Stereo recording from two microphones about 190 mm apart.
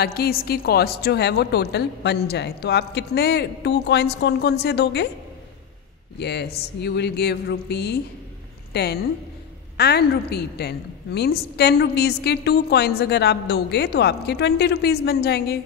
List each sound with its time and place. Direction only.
0.0 s a woman's voice: 55° left (ahead or behind)
6.1 s a woman's voice: 60° left (ahead or behind)